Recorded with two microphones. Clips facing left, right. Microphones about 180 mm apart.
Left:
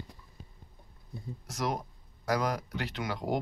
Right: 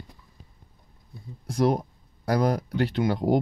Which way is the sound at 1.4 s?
30° right (ahead or behind).